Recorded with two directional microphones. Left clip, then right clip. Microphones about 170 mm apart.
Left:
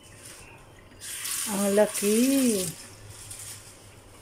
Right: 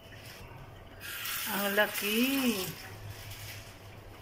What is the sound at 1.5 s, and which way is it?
Speech, 25° left (ahead or behind).